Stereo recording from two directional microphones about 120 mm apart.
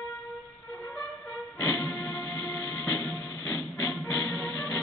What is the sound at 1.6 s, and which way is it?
Music, 20° left (ahead or behind).